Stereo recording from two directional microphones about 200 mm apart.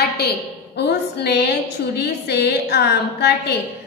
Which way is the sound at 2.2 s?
55° left (ahead or behind).